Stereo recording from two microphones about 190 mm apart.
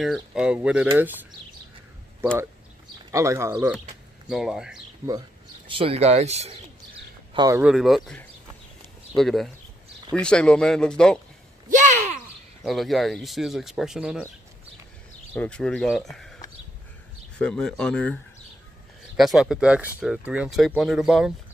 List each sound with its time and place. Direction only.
0.0 s speech: centre (ahead or behind)
3.1 s speech: 15° right (ahead or behind)
3.5 s speech: 5° right (ahead or behind)
5.0 s speech: 15° right (ahead or behind)
5.7 s speech: 30° right (ahead or behind)
7.3 s speech: 15° right (ahead or behind)
7.6 s speech: centre (ahead or behind)
11.7 s a sound: 40° right (ahead or behind)
12.6 s speech: centre (ahead or behind)
15.3 s speech: 5° left (ahead or behind)
17.4 s speech: 5° left (ahead or behind)